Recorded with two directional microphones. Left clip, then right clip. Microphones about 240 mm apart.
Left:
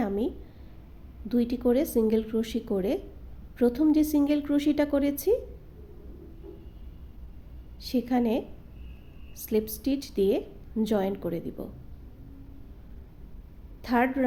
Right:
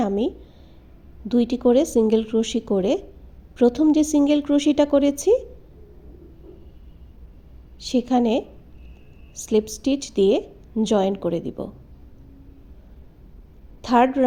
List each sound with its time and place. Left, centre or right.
1.3 s a woman's voice: centre
7.8 s a woman's voice: centre
13.8 s a woman's voice: centre